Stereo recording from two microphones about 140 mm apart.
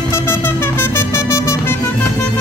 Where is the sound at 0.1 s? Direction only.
20° left (ahead or behind).